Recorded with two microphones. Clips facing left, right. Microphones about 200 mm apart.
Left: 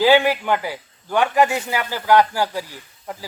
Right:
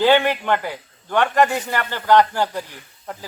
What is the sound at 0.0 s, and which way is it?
A man's voice, 5° left (ahead or behind).